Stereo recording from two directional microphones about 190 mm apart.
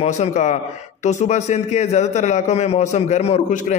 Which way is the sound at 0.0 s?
35° left (ahead or behind).